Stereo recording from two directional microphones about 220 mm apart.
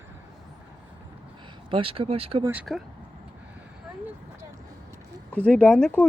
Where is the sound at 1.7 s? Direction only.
25° right (ahead or behind).